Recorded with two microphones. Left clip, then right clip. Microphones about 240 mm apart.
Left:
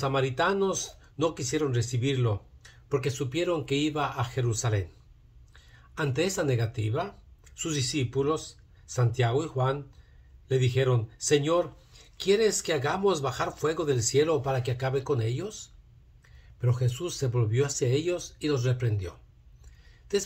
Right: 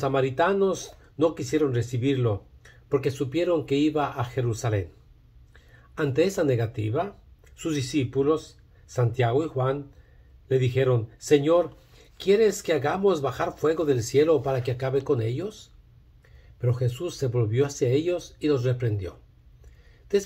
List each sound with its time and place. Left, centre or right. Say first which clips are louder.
0.0 s speech: right 3 dB; centre